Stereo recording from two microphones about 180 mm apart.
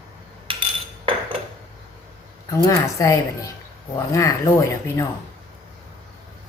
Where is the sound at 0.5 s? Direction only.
30° right (ahead or behind).